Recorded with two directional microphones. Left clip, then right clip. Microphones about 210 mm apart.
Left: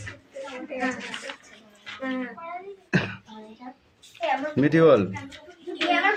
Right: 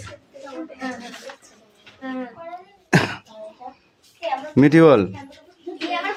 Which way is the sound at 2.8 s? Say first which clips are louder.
Right 8 dB; 45° right (ahead or behind).